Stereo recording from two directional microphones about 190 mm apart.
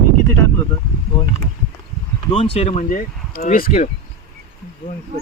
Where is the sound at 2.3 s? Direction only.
35° left (ahead or behind).